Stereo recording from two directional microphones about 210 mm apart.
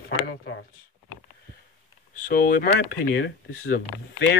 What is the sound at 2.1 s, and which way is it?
Speech, 40° left (ahead or behind).